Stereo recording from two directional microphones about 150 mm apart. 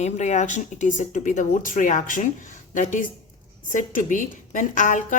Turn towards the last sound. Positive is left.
turn(degrees=60)  # may be behind; listen again after turning